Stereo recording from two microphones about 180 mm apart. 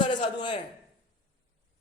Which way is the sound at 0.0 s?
25° left (ahead or behind).